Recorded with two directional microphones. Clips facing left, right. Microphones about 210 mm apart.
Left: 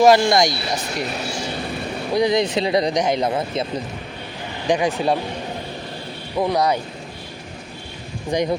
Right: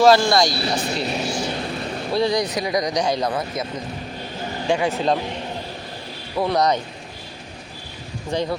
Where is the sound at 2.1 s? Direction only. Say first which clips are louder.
Left 3 dB; 20° left (ahead or behind).